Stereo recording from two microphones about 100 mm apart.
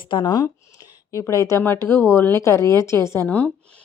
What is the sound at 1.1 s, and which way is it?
Speech, 35° left (ahead or behind).